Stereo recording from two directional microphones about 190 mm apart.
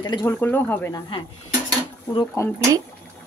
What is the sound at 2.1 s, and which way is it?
Speech, 25° left (ahead or behind).